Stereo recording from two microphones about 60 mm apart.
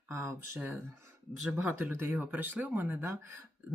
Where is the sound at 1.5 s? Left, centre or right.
Right.